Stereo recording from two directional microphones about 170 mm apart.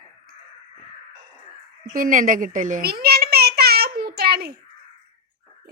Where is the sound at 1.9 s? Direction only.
55° right (ahead or behind).